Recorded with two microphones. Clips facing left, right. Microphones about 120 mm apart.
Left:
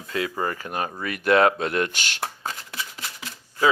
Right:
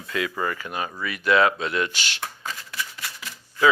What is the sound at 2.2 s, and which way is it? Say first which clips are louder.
Shuffling cards: left 3 dB; 30° left (ahead or behind).